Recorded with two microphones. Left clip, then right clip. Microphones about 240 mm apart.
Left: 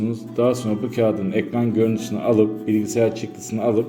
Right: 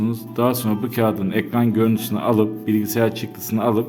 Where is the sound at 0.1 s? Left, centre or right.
Right.